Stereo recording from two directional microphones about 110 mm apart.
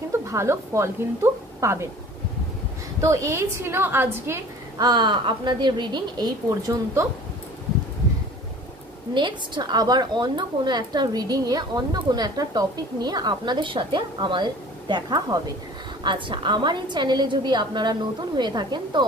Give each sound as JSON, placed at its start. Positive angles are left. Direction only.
{"t": 0.3, "sound": "a woman's voice", "side_deg": -25}
{"t": 3.0, "sound": "a woman's voice", "side_deg": -30}
{"t": 4.7, "sound": "a woman's voice", "side_deg": -40}
{"t": 9.1, "sound": "a woman's voice", "side_deg": -45}